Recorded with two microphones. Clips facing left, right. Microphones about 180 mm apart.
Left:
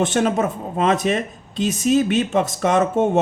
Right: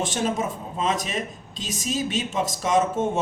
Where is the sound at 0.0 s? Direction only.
60° left (ahead or behind).